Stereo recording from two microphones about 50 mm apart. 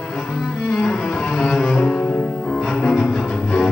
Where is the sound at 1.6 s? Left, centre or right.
Centre.